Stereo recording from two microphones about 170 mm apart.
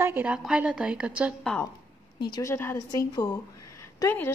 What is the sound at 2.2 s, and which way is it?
A woman's voice, 20° left (ahead or behind).